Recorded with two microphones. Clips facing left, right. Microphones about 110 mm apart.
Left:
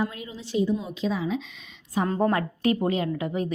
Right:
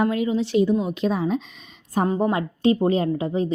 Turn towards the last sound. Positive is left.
turn(degrees=-30)  # may be behind; listen again after turning